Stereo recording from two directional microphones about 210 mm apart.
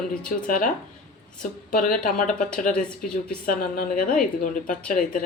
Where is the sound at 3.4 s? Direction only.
40° left (ahead or behind).